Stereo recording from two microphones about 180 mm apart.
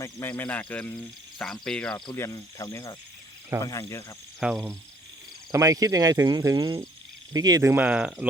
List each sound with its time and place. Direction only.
0.0 s speech: 15° left (ahead or behind)
2.1 s speech: 15° left (ahead or behind)
4.4 s speech: 5° right (ahead or behind)
5.5 s speech: 20° right (ahead or behind)